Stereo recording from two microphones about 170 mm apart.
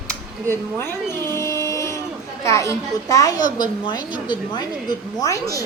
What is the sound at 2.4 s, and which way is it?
A child's voice, 15° left (ahead or behind).